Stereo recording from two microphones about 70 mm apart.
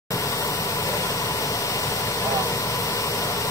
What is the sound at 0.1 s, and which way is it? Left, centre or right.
Vehicle, left.